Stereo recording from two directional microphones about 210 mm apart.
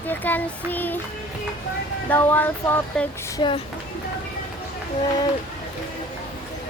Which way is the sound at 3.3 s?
25° left (ahead or behind).